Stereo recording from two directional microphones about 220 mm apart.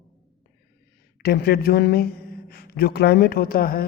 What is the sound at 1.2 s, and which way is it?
A woman's voice, 45° left (ahead or behind).